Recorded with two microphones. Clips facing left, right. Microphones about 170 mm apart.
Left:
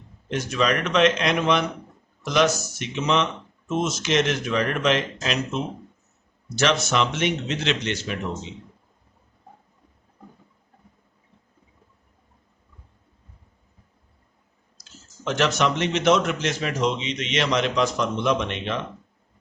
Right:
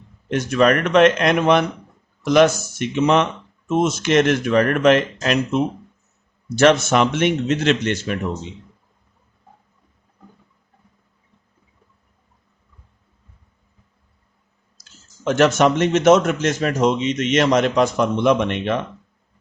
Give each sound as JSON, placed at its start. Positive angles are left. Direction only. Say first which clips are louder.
{"t": 0.3, "sound": "speech", "louder": "right 7 dB", "side_deg": -55}
{"t": 14.8, "sound": "speech", "louder": "left 2 dB", "side_deg": -50}